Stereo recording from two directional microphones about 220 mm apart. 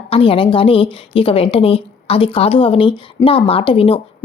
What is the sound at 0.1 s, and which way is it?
A woman's voice, 25° left (ahead or behind).